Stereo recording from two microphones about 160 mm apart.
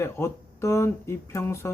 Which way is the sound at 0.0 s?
15° left (ahead or behind).